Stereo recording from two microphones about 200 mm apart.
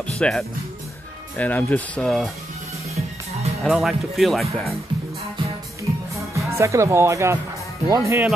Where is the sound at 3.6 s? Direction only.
Centre (ahead or behind).